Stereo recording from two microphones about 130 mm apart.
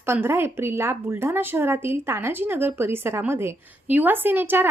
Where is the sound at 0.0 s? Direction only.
20° right (ahead or behind).